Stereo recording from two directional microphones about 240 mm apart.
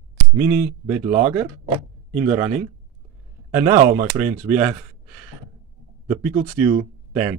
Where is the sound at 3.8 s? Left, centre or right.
Right.